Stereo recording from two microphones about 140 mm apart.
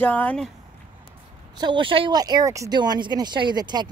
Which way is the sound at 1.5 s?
35° right (ahead or behind).